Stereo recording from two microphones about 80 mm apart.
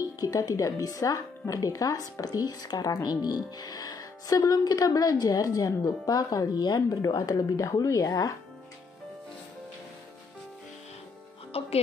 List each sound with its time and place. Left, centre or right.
0.2 s speech: left